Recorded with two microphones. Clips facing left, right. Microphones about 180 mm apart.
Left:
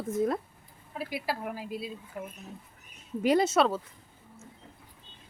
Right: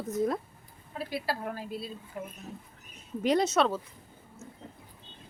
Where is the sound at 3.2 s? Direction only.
5° left (ahead or behind).